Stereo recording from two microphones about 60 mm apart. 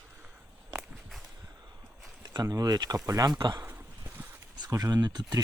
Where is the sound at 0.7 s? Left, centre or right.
Centre.